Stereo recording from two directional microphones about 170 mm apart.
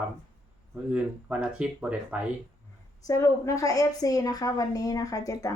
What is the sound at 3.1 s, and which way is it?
A woman's voice, 20° left (ahead or behind).